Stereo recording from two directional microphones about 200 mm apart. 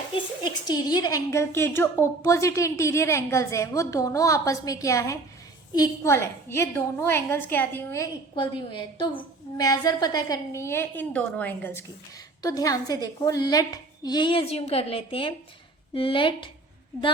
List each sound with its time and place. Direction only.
0.1 s a woman's voice: 20° left (ahead or behind)